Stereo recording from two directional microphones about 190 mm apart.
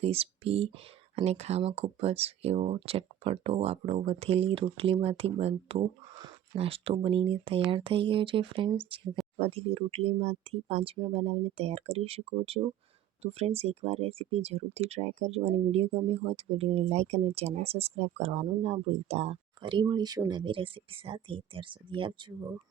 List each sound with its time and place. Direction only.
0.0 s speech: 30° right (ahead or behind)